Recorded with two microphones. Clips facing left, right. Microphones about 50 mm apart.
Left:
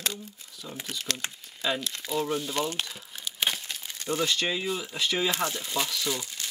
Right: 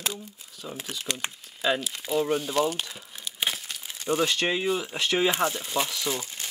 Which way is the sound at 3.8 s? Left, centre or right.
Centre.